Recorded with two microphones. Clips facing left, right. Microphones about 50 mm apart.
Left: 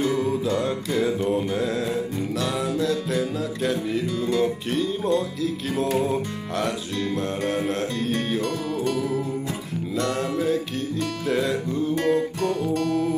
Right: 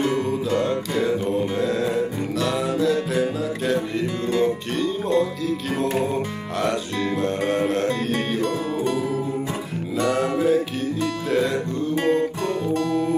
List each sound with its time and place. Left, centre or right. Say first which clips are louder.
1.0 s mantra: right 1 dB; centre
2.4 s music: right 4 dB; centre
7.2 s music: right 5 dB; centre
8.4 s music: right 2 dB; right
9.9 s music: right 4 dB; centre
12.6 s music: right 3 dB; right